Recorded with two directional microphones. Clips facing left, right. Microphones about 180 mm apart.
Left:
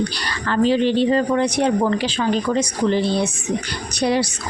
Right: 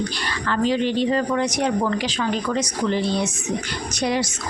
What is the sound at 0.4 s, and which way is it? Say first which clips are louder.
Speech: left 4 dB; 30° left (ahead or behind).